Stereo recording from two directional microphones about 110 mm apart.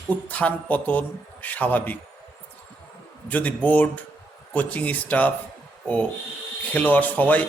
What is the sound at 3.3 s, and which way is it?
A man's voice, 15° left (ahead or behind).